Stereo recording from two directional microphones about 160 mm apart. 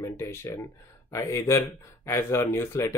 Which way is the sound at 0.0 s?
20° left (ahead or behind).